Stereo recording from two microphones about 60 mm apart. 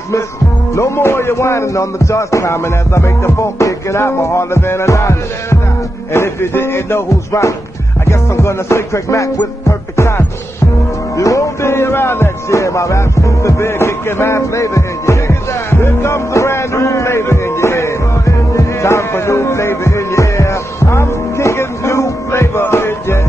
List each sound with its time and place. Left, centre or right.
0.7 s speech: left
4.8 s music: left
6.1 s speech: left
8.0 s music: left
22.6 s music: left